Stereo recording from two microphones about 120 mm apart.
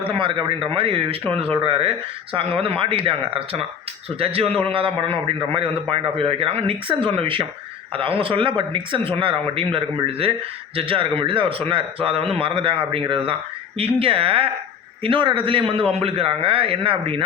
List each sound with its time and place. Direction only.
0.0 s a man's voice: 45° right (ahead or behind)